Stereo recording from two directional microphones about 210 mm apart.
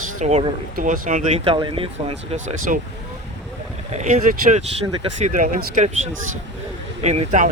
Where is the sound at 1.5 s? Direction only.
25° right (ahead or behind).